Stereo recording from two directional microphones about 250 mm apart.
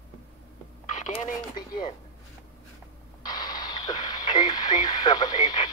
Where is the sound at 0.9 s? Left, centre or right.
Left.